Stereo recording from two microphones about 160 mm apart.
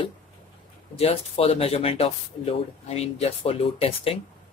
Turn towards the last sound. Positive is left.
turn(degrees=40)  # may be behind; listen again after turning